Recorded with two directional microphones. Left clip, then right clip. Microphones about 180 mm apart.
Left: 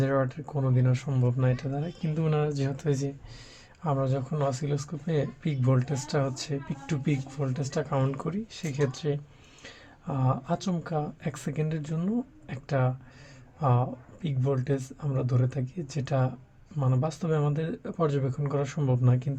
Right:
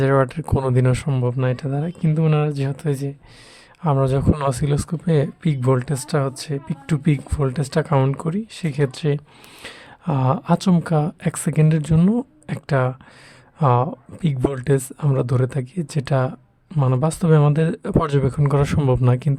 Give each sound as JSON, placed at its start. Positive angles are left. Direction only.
{"t": 0.0, "sound": "speech", "side_deg": -40}
{"t": 3.8, "sound": "speech", "side_deg": -40}